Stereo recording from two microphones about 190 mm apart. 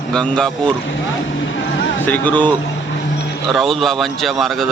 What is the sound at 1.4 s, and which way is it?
Vehicle, 75° left (ahead or behind).